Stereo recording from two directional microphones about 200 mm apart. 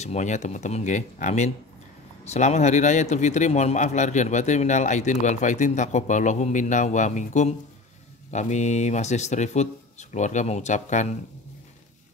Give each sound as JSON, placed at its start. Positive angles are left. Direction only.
{"t": 0.0, "sound": "speech", "side_deg": 35}